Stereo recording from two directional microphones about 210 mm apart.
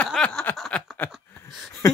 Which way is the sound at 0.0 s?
5° left (ahead or behind).